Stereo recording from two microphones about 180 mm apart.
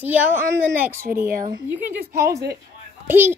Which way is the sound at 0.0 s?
10° right (ahead or behind).